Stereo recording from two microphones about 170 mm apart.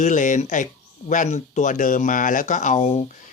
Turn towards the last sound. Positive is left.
turn(degrees=40)  # may be behind; listen again after turning